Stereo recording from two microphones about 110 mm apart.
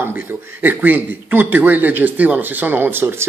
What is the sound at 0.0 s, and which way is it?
Speech, 15° right (ahead or behind).